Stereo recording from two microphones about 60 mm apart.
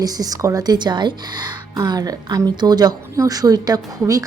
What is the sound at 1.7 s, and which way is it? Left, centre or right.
A woman's voice, right.